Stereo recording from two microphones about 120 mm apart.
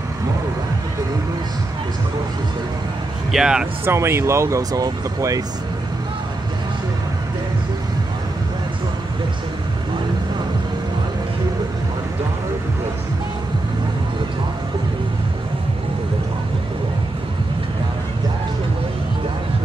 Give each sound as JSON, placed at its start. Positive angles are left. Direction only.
{"t": 3.3, "sound": "speech", "side_deg": -5}
{"t": 3.8, "sound": "speech", "side_deg": -20}